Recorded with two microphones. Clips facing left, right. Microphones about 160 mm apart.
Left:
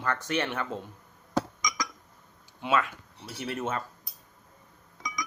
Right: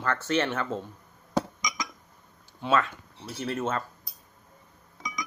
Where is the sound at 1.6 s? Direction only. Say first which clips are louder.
Left 1 dB; 25° right (ahead or behind).